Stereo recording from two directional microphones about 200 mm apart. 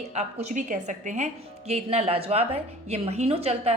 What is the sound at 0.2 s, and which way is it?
A woman's voice, 35° right (ahead or behind).